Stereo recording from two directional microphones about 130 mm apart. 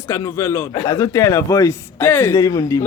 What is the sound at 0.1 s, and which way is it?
Speech, 20° left (ahead or behind).